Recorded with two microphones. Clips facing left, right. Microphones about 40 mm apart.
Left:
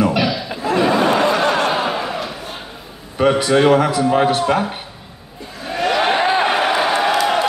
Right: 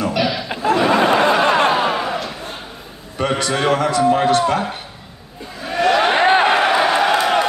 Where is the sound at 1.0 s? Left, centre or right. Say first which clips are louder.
Right 1 dB; right.